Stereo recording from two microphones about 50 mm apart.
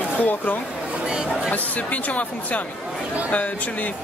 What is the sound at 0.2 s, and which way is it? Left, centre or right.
Speech, left.